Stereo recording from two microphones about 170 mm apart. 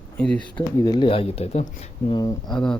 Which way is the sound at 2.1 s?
20° left (ahead or behind).